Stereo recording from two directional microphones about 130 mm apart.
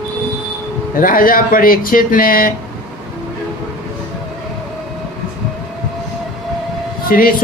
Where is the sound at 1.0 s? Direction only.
90° left.